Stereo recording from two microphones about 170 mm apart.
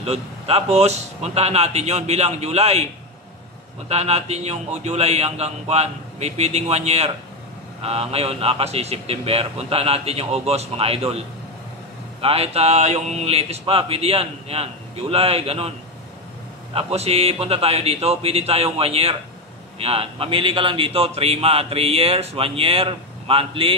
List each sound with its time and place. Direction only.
0.0 s speech: 35° right (ahead or behind)
3.9 s speech: 40° right (ahead or behind)
16.7 s speech: 35° right (ahead or behind)